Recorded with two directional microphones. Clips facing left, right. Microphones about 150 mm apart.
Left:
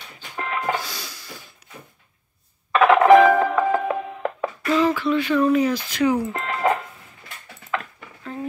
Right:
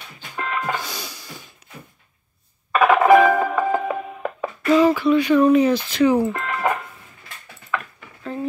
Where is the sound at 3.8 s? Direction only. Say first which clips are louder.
Left 1 dB; 10° right (ahead or behind); by 6.3 s 30° right (ahead or behind).